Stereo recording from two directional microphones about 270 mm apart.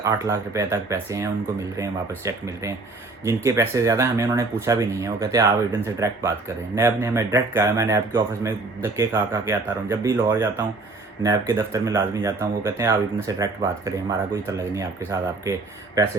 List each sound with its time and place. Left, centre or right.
0.0 s speech: centre